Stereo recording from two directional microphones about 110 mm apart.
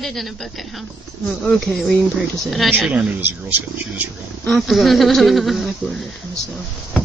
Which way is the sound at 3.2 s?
15° right (ahead or behind).